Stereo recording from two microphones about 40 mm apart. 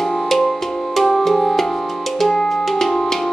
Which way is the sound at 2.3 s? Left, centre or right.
Centre.